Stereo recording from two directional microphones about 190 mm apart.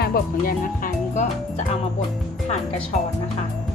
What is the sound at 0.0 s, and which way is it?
Speech, 50° left (ahead or behind).